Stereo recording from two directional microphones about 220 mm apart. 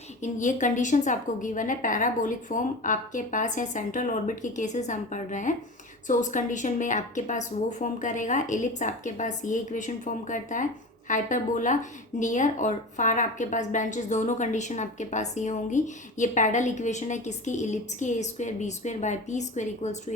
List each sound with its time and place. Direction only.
0.2 s speech: 35° left (ahead or behind)